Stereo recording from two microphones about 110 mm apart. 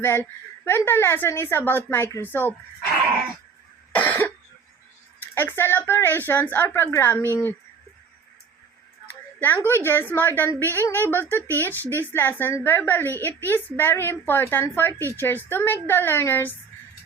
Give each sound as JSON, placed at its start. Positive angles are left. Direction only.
{"t": 0.0, "sound": "a woman's voice", "side_deg": 20}
{"t": 3.9, "sound": "cough", "side_deg": 15}
{"t": 5.2, "sound": "a woman's voice", "side_deg": 20}
{"t": 9.0, "sound": "a sound", "side_deg": 15}
{"t": 9.6, "sound": "a woman's voice", "side_deg": 20}